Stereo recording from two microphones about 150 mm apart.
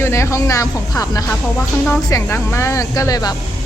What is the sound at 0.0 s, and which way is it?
A woman's voice, 20° left (ahead or behind).